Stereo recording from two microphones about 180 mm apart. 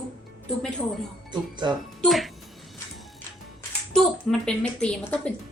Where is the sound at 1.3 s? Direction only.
25° right (ahead or behind).